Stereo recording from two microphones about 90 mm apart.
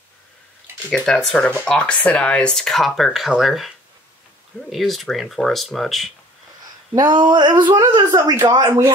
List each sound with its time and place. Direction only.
0.8 s speech: 10° left (ahead or behind)
6.9 s a sound: 45° right (ahead or behind)
8.0 s speech: 35° right (ahead or behind)